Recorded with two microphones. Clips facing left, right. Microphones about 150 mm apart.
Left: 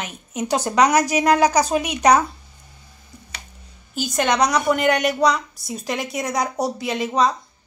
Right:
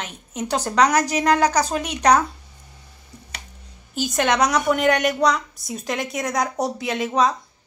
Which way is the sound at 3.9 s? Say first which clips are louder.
Even; centre (ahead or behind).